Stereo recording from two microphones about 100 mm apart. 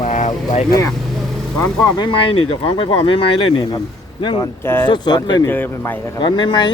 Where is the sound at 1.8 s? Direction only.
45° left (ahead or behind).